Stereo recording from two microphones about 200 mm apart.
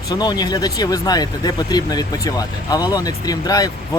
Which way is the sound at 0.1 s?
20° left (ahead or behind).